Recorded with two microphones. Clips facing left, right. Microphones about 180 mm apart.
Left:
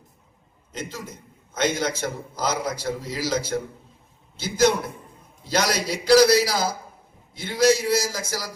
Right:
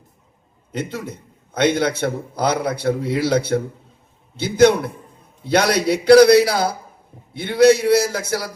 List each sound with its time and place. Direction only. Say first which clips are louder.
0.7 s a man's voice: right 7 dB; 60° right (ahead or behind)